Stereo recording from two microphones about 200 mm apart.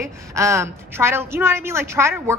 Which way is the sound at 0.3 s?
15° right (ahead or behind).